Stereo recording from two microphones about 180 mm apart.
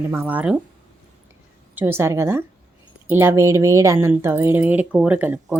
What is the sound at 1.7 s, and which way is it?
A woman's voice, 10° right (ahead or behind).